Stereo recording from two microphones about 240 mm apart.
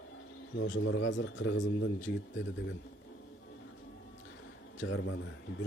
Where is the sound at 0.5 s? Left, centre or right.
Left.